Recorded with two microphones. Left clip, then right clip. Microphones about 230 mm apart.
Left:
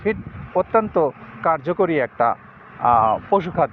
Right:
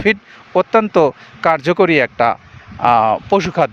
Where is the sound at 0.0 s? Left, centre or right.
Right.